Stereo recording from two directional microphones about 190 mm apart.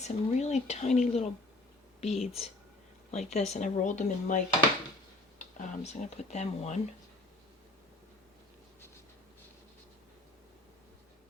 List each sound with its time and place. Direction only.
0.0 s speech: 35° left (ahead or behind)
5.5 s speech: 40° left (ahead or behind)